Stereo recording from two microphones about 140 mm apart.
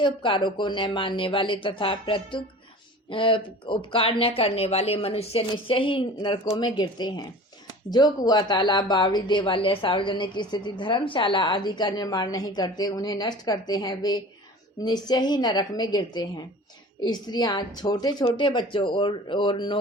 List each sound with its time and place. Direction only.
0.0 s a woman's voice: 35° left (ahead or behind)